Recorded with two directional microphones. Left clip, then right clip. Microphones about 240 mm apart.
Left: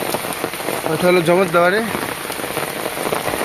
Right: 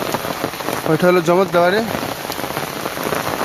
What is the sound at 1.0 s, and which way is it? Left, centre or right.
Speech, right.